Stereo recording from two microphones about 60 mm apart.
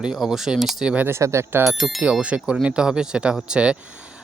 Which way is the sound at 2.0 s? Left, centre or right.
Right.